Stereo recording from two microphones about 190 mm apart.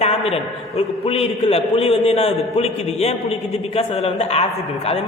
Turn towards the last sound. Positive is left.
turn(degrees=30)  # may be behind; listen again after turning